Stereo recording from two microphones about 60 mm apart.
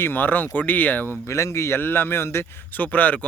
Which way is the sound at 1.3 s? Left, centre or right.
Left.